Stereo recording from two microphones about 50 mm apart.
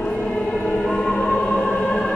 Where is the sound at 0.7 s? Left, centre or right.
Centre.